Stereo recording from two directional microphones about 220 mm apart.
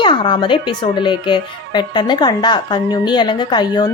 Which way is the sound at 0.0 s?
20° left (ahead or behind).